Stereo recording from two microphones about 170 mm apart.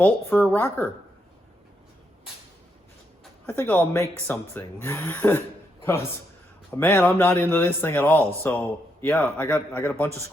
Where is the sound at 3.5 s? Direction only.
10° left (ahead or behind).